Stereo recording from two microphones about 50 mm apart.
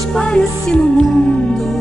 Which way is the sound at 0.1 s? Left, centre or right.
Centre.